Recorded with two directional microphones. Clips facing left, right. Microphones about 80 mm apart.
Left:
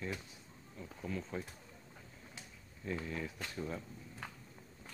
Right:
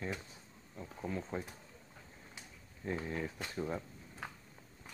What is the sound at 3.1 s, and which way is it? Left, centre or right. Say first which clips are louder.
Speech: right 2 dB; right.